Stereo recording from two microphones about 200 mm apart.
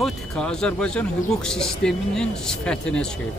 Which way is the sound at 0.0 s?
5° left (ahead or behind).